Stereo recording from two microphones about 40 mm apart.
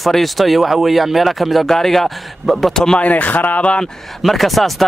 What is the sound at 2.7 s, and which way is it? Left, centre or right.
Speech, centre.